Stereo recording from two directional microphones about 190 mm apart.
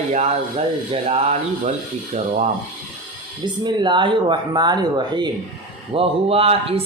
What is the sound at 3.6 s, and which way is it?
Speech, 25° right (ahead or behind).